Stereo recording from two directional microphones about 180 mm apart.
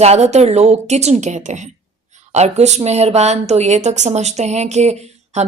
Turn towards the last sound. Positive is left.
turn(degrees=-40)  # may be behind; listen again after turning